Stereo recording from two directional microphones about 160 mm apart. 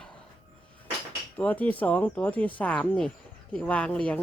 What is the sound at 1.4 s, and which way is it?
A woman's voice, 10° left (ahead or behind).